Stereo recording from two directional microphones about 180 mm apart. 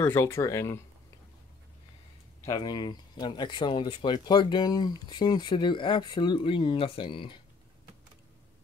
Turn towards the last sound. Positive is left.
turn(degrees=25)  # may be behind; listen again after turning